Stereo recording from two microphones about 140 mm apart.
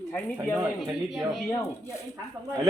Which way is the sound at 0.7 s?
Centre (ahead or behind).